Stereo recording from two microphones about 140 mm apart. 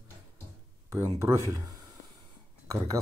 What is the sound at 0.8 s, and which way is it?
Speech, 20° right (ahead or behind).